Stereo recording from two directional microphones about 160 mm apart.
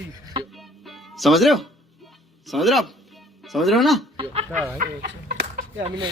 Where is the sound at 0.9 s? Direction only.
Centre (ahead or behind).